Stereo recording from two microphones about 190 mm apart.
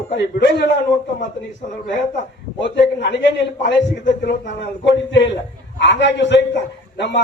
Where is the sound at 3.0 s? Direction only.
65° left (ahead or behind).